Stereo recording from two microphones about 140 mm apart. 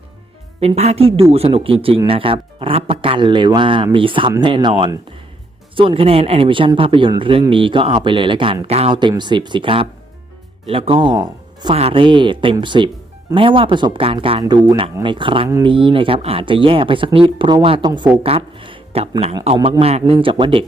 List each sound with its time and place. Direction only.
0.6 s a woman's voice: 50° right (ahead or behind)
8.9 s speech: 35° right (ahead or behind)
11.7 s speech: 45° right (ahead or behind)
19.8 s a woman's voice: 45° right (ahead or behind)